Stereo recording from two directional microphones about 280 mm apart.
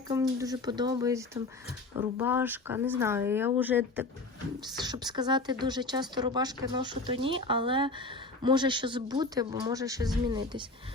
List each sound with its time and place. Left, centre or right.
0.1 s speech: centre